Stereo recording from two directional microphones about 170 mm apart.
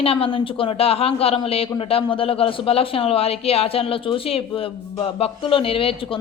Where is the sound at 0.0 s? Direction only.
35° left (ahead or behind).